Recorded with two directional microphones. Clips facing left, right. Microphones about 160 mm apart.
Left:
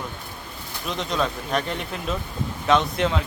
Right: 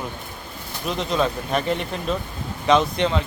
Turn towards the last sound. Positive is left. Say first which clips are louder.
# right 2 dB
turn(degrees=0)  # may be behind; listen again after turning